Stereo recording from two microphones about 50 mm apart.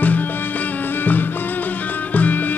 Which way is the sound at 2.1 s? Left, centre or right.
Left.